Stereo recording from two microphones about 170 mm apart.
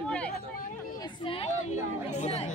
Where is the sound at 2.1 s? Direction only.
40° left (ahead or behind).